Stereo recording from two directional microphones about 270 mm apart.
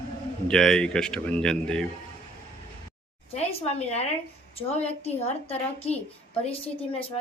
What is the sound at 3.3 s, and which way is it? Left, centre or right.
A woman's voice, left.